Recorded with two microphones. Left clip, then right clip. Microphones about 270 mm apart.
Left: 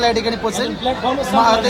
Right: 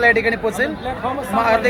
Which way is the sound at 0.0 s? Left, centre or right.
Centre.